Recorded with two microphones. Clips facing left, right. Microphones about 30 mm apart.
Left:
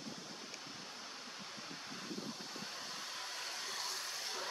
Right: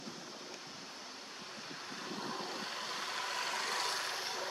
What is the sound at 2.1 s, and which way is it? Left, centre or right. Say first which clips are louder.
Vehicle: right 5 dB; right.